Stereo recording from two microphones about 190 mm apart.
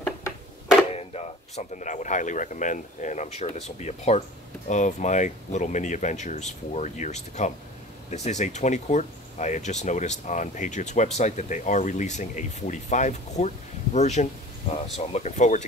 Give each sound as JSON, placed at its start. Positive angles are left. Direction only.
{"t": 0.9, "sound": "speech", "side_deg": 35}